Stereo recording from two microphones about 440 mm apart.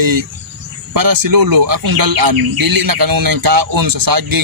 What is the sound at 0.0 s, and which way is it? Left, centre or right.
Speech, right.